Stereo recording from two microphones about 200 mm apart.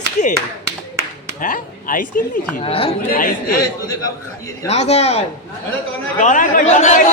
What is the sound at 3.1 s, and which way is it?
Speech, 45° left (ahead or behind).